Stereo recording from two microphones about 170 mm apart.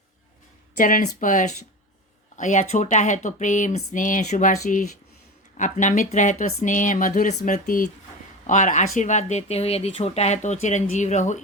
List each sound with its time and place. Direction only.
0.8 s speech: 50° left (ahead or behind)